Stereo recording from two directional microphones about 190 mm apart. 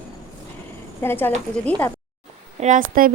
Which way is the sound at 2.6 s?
45° right (ahead or behind).